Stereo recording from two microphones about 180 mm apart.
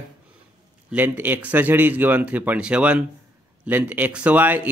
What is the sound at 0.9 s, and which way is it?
Speech, 10° right (ahead or behind).